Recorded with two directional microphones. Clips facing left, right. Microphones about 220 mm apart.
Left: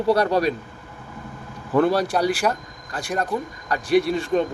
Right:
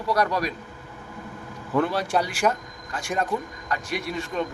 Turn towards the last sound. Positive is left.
turn(degrees=35)  # may be behind; listen again after turning